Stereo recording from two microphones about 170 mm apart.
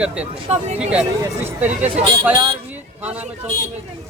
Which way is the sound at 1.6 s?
10° right (ahead or behind).